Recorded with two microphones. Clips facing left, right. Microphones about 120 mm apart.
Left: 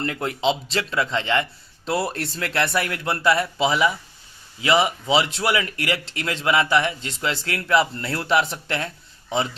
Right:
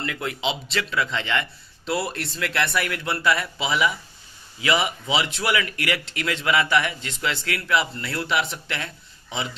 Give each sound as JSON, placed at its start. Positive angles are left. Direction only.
{"t": 0.0, "sound": "a man's voice", "side_deg": 35}